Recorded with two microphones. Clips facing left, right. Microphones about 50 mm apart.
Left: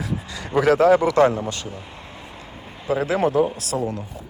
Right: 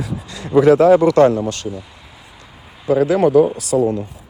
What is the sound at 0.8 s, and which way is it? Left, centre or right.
Speech, left.